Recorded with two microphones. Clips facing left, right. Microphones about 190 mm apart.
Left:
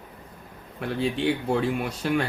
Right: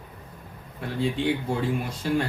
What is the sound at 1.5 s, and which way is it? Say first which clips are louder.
Speech: left 2 dB; 70° left (ahead or behind).